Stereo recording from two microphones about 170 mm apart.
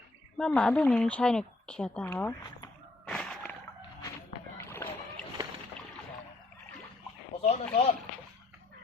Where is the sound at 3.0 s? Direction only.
5° left (ahead or behind).